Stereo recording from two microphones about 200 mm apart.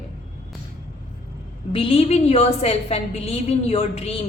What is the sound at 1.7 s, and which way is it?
A woman's voice, 25° left (ahead or behind).